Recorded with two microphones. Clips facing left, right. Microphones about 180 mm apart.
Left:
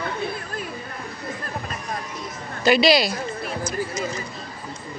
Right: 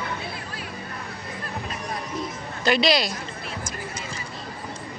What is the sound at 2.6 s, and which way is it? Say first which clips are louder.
Speech: left 4 dB; 5° left (ahead or behind).